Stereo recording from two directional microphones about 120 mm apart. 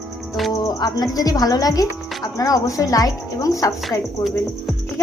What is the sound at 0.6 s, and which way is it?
Speech, 30° left (ahead or behind).